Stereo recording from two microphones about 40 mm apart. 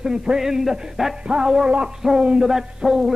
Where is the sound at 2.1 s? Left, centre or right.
Right.